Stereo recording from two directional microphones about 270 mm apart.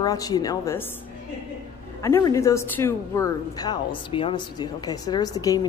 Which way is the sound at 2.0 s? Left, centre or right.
Centre.